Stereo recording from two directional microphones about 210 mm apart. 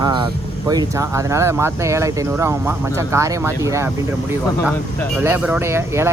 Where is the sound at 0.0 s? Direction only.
20° right (ahead or behind).